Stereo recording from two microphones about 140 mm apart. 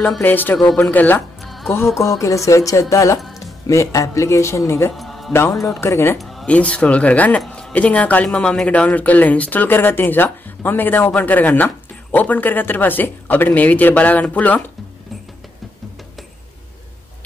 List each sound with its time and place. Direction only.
0.2 s speech: 15° left (ahead or behind)
1.4 s music: centre (ahead or behind)
2.0 s speech: 20° left (ahead or behind)
4.9 s music: centre (ahead or behind)
5.3 s speech: 15° left (ahead or behind)
6.1 s speech: centre (ahead or behind)